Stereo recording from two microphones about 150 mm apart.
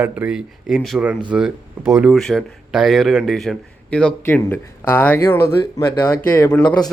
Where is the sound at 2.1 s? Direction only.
Centre (ahead or behind).